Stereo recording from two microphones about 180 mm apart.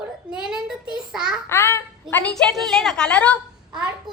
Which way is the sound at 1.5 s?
10° left (ahead or behind).